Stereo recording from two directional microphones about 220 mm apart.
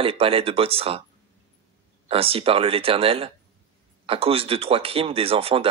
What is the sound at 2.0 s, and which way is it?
Speech, 25° right (ahead or behind).